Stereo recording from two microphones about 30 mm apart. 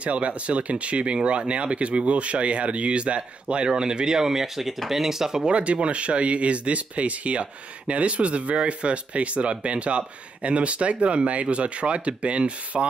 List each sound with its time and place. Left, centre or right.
0.0 s speech: right; by 5.5 s centre
5.5 s speech: right